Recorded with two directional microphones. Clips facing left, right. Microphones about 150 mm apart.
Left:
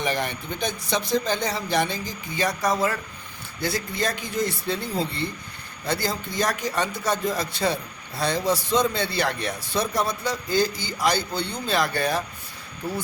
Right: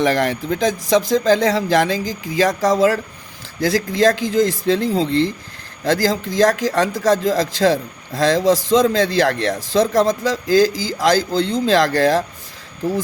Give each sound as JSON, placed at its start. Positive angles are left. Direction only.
{"t": 0.0, "sound": "speech", "side_deg": -90}